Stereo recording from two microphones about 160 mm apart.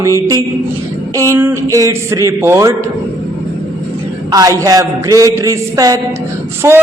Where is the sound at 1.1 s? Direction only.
20° right (ahead or behind).